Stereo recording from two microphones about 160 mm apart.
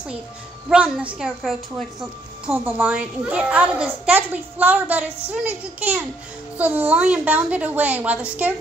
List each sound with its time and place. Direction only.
0.7 s a woman's voice: 5° right (ahead or behind)